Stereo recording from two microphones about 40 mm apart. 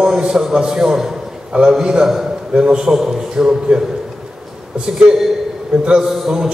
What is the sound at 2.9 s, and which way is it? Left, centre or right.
Speech, centre.